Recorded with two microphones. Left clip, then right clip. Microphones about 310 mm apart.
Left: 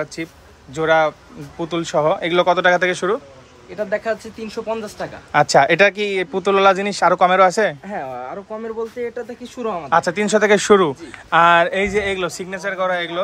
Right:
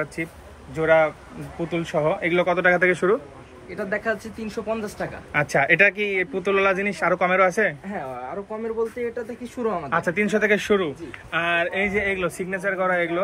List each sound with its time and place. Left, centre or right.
0.0 s speech: centre
3.7 s speech: left
5.3 s speech: centre
7.9 s speech: left
9.8 s speech: centre